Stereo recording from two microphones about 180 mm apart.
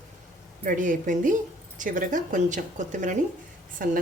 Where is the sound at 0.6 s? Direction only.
45° right (ahead or behind).